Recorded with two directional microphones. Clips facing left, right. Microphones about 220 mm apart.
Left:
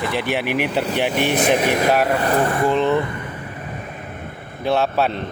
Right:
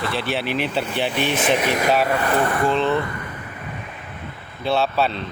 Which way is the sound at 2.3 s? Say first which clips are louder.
Left 2 dB; 25° left (ahead or behind).